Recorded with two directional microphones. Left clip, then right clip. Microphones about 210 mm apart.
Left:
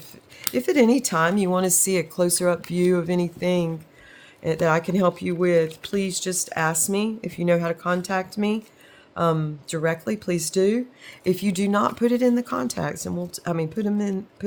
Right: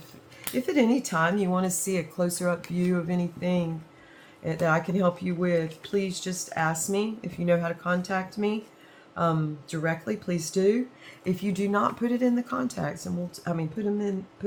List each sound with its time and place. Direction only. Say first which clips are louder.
0.4 s speech: left 6 dB; 50° left (ahead or behind)